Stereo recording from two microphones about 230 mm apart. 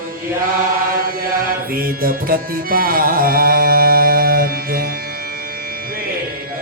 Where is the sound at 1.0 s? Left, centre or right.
Right.